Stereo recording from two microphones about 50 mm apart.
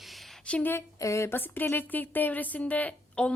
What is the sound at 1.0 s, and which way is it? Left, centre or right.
Speech, left.